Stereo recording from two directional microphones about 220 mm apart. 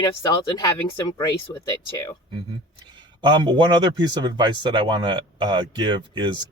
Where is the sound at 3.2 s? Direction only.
20° right (ahead or behind).